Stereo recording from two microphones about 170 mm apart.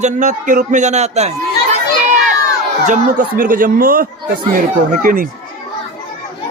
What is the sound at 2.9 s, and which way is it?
Speech, 50° right (ahead or behind).